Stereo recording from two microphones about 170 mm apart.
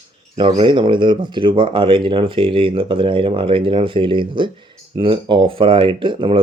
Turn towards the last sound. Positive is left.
turn(degrees=-30)  # may be behind; listen again after turning